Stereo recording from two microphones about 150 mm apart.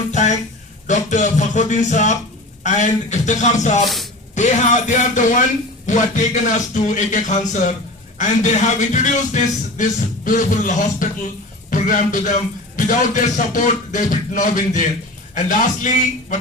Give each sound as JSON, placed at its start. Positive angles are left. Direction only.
{"t": 0.1, "sound": "a sound", "side_deg": 55}
{"t": 0.9, "sound": "speech", "side_deg": 55}
{"t": 3.8, "sound": "speech", "side_deg": 0}
{"t": 4.4, "sound": "a man's voice", "side_deg": 55}